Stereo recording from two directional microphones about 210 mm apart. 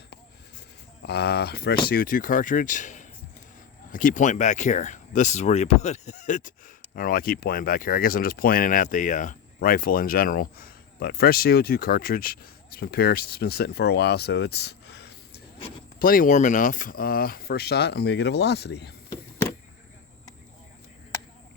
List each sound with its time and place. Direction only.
1.0 s speech: 50° left (ahead or behind)
16.0 s speech: 40° left (ahead or behind)